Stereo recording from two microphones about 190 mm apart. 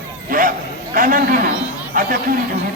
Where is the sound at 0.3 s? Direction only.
45° right (ahead or behind).